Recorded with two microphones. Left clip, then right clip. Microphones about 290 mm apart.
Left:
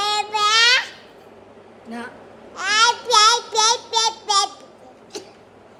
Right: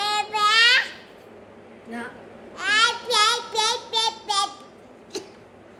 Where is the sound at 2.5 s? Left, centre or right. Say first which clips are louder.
Left 3 dB; centre.